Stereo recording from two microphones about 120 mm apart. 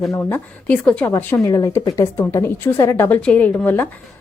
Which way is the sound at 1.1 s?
25° left (ahead or behind).